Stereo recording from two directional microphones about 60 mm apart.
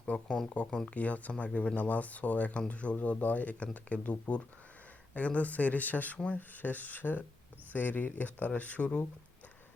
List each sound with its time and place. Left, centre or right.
0.0 s speech: centre